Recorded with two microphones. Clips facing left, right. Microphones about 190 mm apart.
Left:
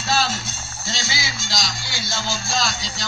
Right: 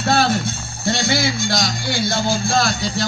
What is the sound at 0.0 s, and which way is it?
Music, 55° right (ahead or behind).